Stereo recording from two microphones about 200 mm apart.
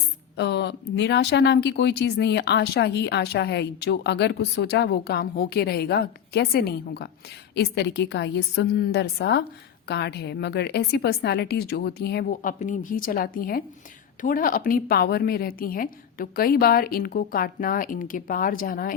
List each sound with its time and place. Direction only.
0.3 s a woman's voice: 60° left (ahead or behind)